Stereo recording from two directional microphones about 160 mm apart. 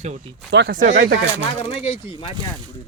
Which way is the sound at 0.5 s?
90° right.